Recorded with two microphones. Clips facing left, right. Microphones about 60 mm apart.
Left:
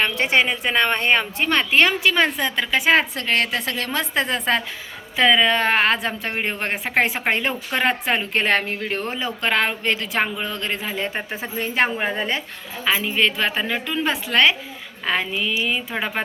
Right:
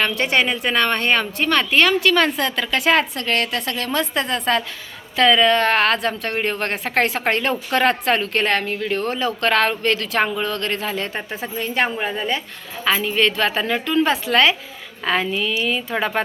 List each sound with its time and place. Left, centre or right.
0.0 s a woman's voice: centre
2.9 s a woman's voice: left
9.0 s a woman's voice: centre
12.8 s a woman's voice: centre